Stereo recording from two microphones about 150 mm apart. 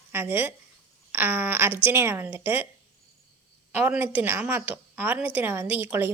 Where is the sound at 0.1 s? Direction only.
15° right (ahead or behind).